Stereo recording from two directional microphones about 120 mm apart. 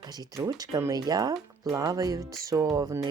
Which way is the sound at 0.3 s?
30° right (ahead or behind).